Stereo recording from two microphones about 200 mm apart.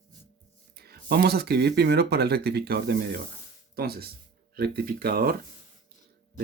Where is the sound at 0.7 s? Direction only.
50° right (ahead or behind).